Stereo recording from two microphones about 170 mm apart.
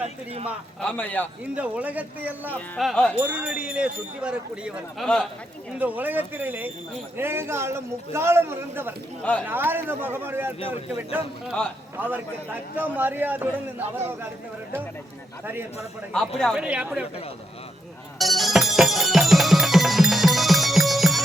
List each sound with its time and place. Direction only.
0.0 s a man's voice: 35° right (ahead or behind)
0.8 s a man's voice: 5° left (ahead or behind)
1.5 s a man's voice: 10° right (ahead or behind)
2.5 s a man's voice: 10° left (ahead or behind)
2.8 s wind chime: 5° left (ahead or behind)
3.2 s a man's voice: 5° right (ahead or behind)
5.0 s wind chime: 5° left (ahead or behind)
5.8 s a man's voice: 10° right (ahead or behind)
16.4 s a man's voice: centre (ahead or behind)
18.2 s music: centre (ahead or behind)